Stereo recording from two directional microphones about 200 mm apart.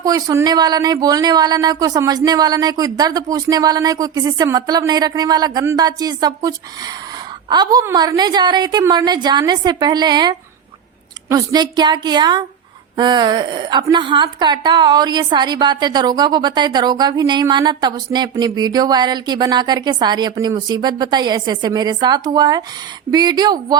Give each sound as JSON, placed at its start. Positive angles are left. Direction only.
{"t": 0.0, "sound": "a woman's voice", "side_deg": -15}
{"t": 7.5, "sound": "a woman's voice", "side_deg": -20}